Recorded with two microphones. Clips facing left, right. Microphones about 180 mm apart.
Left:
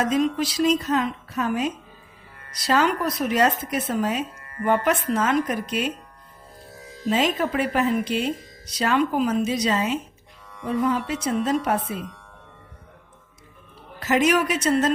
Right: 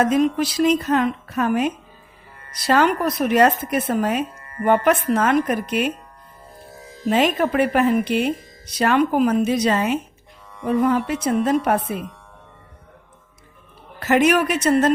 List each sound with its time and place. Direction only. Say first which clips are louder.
0.0 s speech: right 4 dB; 55° right (ahead or behind)
7.0 s speech: right 4 dB; 55° right (ahead or behind)
14.0 s speech: right 3 dB; 55° right (ahead or behind)